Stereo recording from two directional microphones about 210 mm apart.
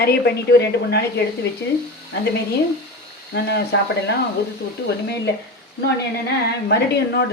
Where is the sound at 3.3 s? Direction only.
50° left (ahead or behind).